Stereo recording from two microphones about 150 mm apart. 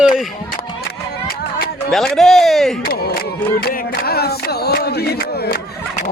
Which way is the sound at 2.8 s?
80° left.